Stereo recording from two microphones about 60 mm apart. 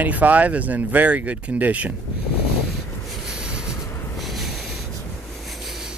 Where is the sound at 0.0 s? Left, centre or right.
Right.